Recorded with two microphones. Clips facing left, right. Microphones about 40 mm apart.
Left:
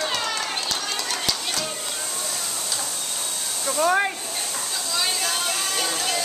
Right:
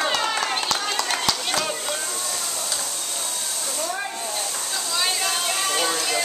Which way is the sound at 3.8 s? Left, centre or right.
Left.